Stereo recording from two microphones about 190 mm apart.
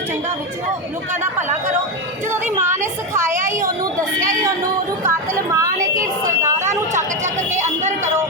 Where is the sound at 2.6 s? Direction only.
15° right (ahead or behind).